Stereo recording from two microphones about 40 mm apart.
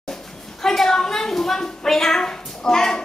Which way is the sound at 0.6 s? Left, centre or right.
Centre.